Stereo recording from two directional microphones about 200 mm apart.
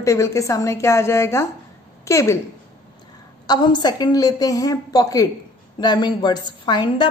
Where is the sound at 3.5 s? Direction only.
20° left (ahead or behind).